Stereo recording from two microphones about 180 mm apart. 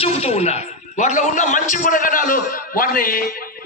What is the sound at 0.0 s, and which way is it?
A man's voice, 35° left (ahead or behind).